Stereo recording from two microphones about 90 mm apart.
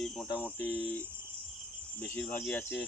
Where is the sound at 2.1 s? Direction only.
15° left (ahead or behind).